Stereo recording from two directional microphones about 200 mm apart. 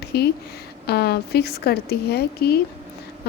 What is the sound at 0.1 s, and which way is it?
A woman's voice, 55° left (ahead or behind).